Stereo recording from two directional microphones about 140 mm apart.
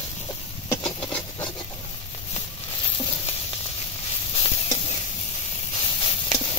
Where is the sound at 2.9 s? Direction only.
40° left (ahead or behind).